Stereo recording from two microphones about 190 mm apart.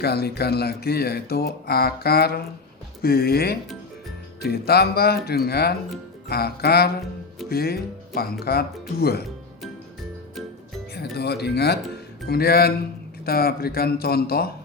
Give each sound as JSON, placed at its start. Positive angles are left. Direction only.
{"t": 0.0, "sound": "speech", "side_deg": 55}
{"t": 10.9, "sound": "speech", "side_deg": 60}